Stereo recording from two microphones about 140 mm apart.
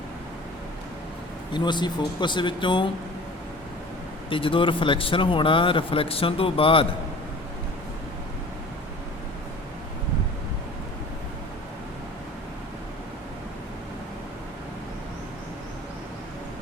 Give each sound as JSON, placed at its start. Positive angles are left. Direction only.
{"t": 1.5, "sound": "speech", "side_deg": 30}
{"t": 4.3, "sound": "speech", "side_deg": 40}